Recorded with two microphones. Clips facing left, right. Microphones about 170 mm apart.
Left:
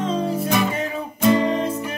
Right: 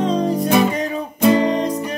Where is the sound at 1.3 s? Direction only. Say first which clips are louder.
Right 2 dB; 35° right (ahead or behind).